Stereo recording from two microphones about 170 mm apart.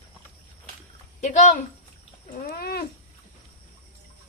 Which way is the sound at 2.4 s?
65° left (ahead or behind).